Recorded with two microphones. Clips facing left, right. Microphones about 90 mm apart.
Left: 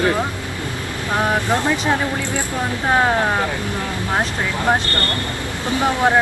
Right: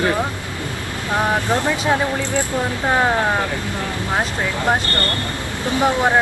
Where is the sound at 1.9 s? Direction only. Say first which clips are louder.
Right 1 dB; 20° right (ahead or behind).